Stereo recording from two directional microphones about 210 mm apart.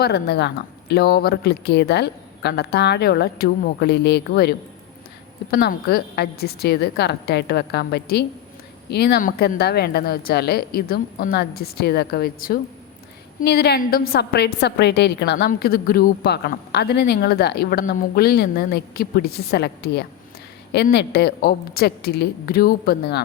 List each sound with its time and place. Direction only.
0.0 s a woman's voice: 50° left (ahead or behind)